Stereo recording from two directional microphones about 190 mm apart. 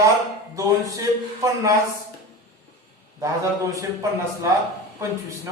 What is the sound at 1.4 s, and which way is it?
Speech, 15° right (ahead or behind).